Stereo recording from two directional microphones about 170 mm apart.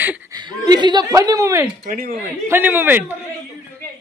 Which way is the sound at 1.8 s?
60° right (ahead or behind).